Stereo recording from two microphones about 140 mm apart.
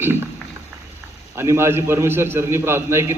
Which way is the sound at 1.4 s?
20° right (ahead or behind).